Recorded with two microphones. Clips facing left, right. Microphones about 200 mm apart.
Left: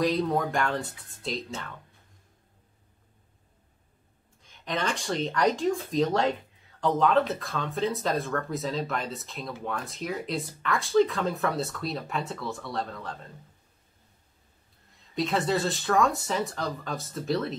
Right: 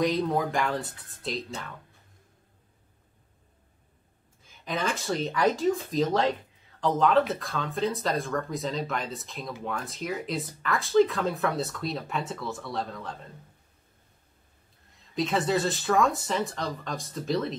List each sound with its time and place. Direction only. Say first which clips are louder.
0.0 s speech: even; centre (ahead or behind)
4.4 s speech: even; 5° right (ahead or behind)
15.1 s speech: right 1 dB; centre (ahead or behind)